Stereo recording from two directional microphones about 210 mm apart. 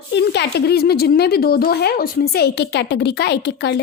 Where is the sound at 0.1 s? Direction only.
55° left (ahead or behind).